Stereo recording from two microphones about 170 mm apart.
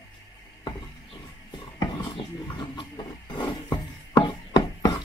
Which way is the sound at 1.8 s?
25° left (ahead or behind).